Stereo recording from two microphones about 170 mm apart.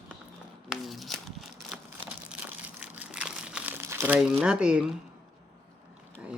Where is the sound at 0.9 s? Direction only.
Centre (ahead or behind).